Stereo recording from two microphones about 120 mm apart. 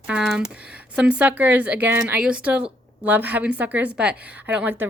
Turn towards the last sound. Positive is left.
turn(degrees=-15)  # may be behind; listen again after turning